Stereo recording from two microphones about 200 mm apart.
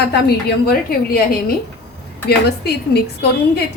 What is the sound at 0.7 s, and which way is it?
Speech, 50° left (ahead or behind).